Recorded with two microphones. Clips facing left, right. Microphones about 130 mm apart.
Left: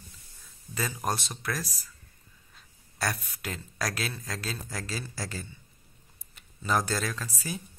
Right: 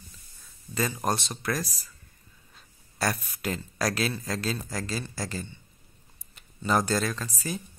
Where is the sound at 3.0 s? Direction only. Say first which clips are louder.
Right 3 dB; centre (ahead or behind).